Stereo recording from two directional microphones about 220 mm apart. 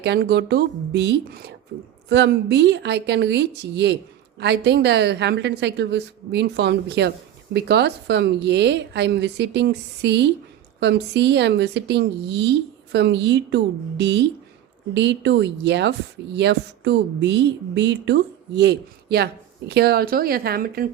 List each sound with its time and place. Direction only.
0.0 s speech: 50° right (ahead or behind)